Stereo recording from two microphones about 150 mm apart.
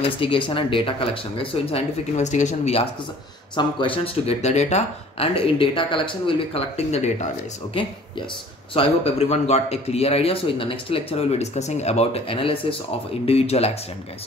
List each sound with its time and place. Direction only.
0.0 s speech: 35° left (ahead or behind)
7.7 s a man's voice: 35° left (ahead or behind)